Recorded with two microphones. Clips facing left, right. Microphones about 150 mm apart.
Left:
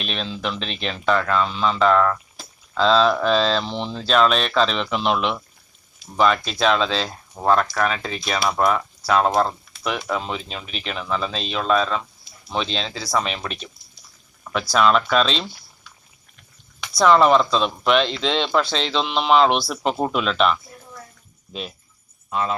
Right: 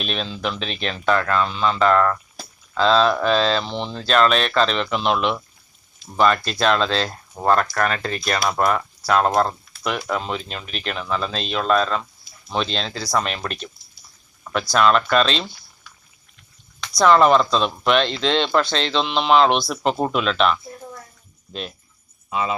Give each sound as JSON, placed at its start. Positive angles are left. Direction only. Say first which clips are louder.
{"t": 0.0, "sound": "speech", "louder": "right 1 dB", "side_deg": 0}
{"t": 14.7, "sound": "speech", "louder": "right 1 dB", "side_deg": 0}
{"t": 16.8, "sound": "speech", "louder": "right 1 dB", "side_deg": 5}
{"t": 22.3, "sound": "speech", "louder": "even", "side_deg": -5}